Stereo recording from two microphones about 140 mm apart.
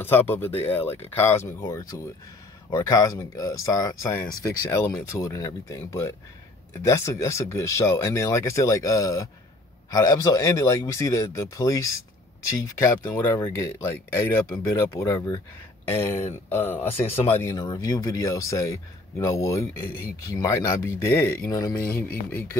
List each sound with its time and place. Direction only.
0.0 s speech: 15° left (ahead or behind)
17.6 s speech: 30° left (ahead or behind)